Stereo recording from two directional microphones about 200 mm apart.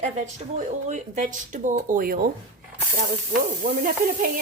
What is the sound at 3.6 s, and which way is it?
Speech, 45° right (ahead or behind).